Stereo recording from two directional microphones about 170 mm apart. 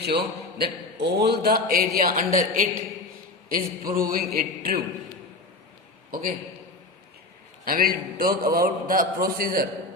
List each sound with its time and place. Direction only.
0.0 s a man's voice: 70° right (ahead or behind)
7.6 s a man's voice: 55° right (ahead or behind)